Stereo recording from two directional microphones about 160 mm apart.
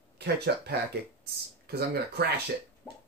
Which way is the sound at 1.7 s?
85° right.